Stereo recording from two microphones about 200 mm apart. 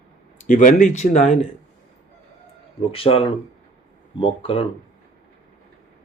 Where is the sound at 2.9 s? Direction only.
30° left (ahead or behind).